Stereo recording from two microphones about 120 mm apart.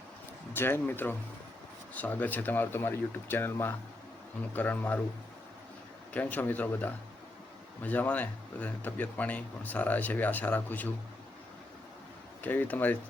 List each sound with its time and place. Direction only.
0.5 s speech: 20° left (ahead or behind)
6.1 s speech: 15° left (ahead or behind)
12.4 s speech: 15° left (ahead or behind)